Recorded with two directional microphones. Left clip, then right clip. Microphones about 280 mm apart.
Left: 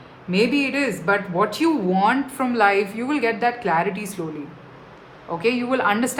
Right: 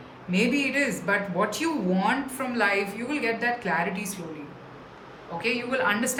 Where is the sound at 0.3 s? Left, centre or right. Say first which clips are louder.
Left 5 dB; centre.